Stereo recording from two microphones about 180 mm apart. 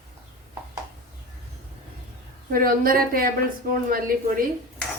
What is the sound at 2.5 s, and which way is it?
Speech, 55° right (ahead or behind).